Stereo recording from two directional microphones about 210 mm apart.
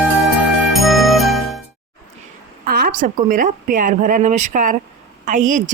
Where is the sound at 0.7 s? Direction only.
Centre (ahead or behind).